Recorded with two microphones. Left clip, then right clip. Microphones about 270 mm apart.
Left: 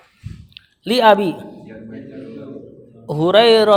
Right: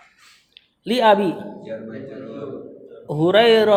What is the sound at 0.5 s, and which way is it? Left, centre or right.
Speech, left.